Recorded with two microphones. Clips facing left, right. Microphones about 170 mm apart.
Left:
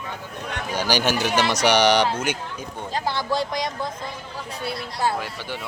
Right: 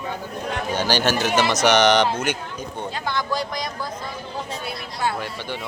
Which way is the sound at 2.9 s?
35° left (ahead or behind).